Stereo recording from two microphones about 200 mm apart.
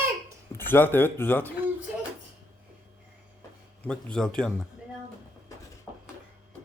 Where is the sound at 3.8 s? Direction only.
5° left (ahead or behind).